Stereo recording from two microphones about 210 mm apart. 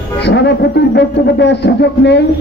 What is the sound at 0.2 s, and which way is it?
A man's voice, 55° left (ahead or behind).